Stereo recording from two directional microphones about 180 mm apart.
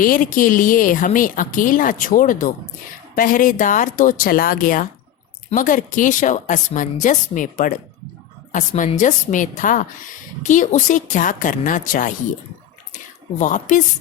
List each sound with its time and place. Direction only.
0.0 s speech: 50° left (ahead or behind)
13.4 s speech: 45° left (ahead or behind)